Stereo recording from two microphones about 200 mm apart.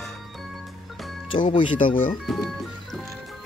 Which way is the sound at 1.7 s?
40° left (ahead or behind).